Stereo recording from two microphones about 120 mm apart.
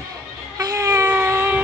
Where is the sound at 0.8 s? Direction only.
25° right (ahead or behind).